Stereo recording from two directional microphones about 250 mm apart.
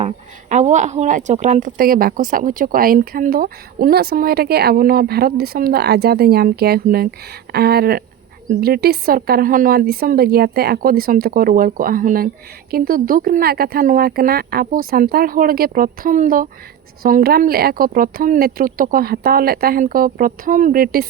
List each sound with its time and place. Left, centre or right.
0.0 s a woman's voice: right